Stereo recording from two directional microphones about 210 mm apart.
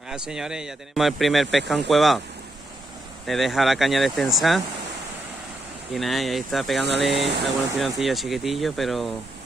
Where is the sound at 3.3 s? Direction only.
Centre (ahead or behind).